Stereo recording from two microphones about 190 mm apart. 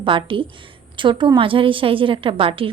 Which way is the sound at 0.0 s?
25° right (ahead or behind).